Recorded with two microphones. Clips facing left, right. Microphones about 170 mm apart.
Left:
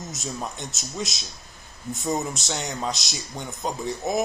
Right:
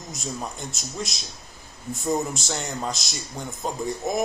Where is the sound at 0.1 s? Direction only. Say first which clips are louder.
Right 3 dB; centre (ahead or behind).